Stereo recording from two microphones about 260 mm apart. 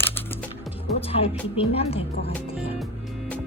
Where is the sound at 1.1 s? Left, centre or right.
Left.